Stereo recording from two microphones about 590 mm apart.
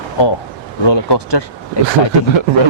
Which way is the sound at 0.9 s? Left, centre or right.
Left.